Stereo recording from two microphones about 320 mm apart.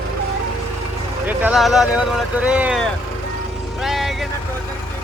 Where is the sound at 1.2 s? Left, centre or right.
Centre.